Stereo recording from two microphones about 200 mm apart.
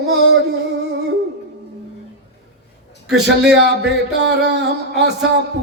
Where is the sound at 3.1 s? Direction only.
60° right (ahead or behind).